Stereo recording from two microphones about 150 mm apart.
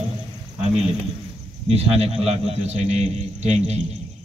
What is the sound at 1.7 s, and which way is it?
A man's voice, 45° right (ahead or behind).